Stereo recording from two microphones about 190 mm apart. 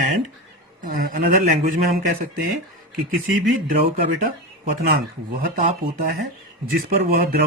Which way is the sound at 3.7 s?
50° right (ahead or behind).